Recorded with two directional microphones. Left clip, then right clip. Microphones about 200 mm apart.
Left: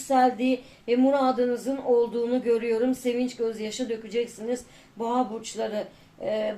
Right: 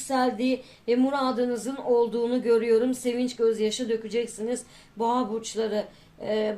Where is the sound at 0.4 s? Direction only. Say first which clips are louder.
Even; 35° right (ahead or behind).